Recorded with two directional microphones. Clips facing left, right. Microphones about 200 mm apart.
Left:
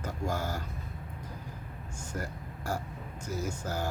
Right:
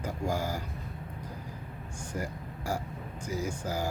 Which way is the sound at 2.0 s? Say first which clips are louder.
Right 2 dB; 10° right (ahead or behind).